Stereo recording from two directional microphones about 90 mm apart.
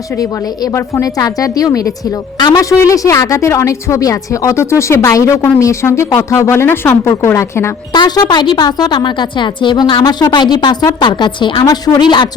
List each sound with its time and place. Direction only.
0.2 s a woman's voice: 35° left (ahead or behind)
7.9 s a woman's voice: 50° left (ahead or behind)
11.6 s a woman's voice: 50° left (ahead or behind)